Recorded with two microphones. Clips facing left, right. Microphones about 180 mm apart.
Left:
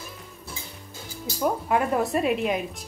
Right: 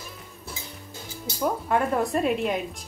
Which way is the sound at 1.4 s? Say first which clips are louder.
Left 1 dB; 5° left (ahead or behind).